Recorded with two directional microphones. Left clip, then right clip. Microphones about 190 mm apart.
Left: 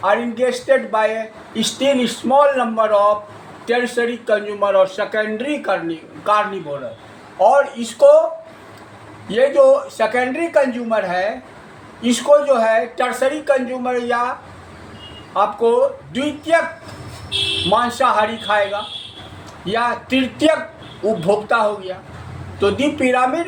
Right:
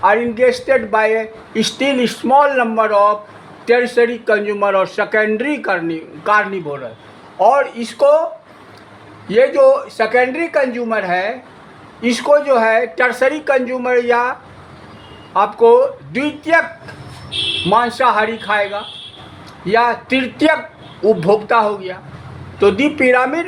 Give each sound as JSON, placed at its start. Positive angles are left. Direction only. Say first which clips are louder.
{"t": 0.0, "sound": "speech", "louder": "right 5 dB", "side_deg": -50}
{"t": 7.3, "sound": "speech", "louder": "right 1 dB", "side_deg": -45}
{"t": 9.3, "sound": "speech", "louder": "right 2 dB", "side_deg": -45}
{"t": 15.4, "sound": "speech", "louder": "right 5 dB", "side_deg": -45}
{"t": 17.7, "sound": "speech", "louder": "right 3 dB", "side_deg": -45}